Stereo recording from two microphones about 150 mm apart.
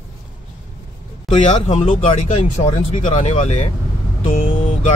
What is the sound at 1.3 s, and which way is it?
Speech, 50° left (ahead or behind).